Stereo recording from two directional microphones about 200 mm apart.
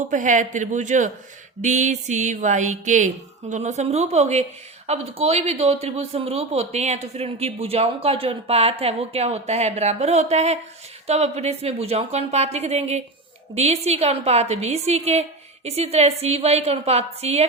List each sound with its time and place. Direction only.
0.1 s speech: 40° right (ahead or behind)